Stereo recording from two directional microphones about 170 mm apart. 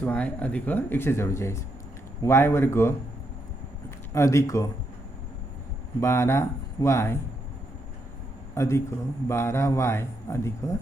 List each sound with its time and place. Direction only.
0.0 s speech: 10° left (ahead or behind)
4.1 s speech: 15° left (ahead or behind)
6.0 s speech: 15° left (ahead or behind)
8.5 s a man's voice: 15° left (ahead or behind)